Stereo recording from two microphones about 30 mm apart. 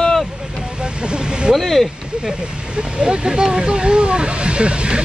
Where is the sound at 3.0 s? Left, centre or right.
Right.